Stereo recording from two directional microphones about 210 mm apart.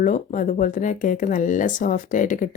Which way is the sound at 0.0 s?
40° left (ahead or behind).